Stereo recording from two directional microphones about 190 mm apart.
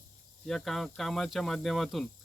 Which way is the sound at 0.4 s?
Centre (ahead or behind).